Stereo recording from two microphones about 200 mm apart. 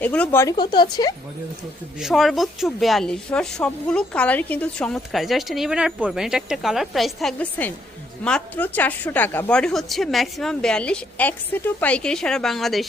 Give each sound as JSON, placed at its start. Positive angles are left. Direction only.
{"t": 0.0, "sound": "speech", "side_deg": 5}
{"t": 2.0, "sound": "speech", "side_deg": 0}